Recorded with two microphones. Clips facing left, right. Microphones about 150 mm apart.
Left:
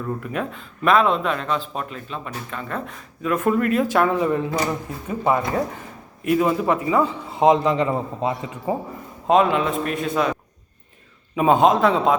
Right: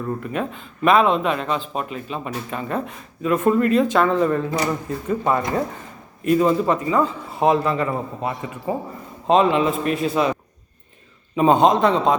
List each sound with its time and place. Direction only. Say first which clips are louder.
0.2 s a man's voice: right 1 dB; centre (ahead or behind); by 2.8 s 15° right (ahead or behind)
3.2 s a man's voice: right 2 dB; centre (ahead or behind); by 8.7 s 20° left (ahead or behind)
9.2 s a man's voice: right 1 dB; centre (ahead or behind)
11.3 s a man's voice: right 1 dB; 5° left (ahead or behind)